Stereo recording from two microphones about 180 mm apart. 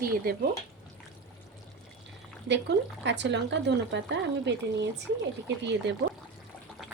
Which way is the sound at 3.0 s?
75° right (ahead or behind).